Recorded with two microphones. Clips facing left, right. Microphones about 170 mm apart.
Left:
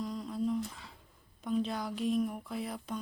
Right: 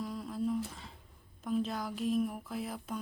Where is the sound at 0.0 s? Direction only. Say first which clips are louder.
Left 1 dB; 5° right (ahead or behind).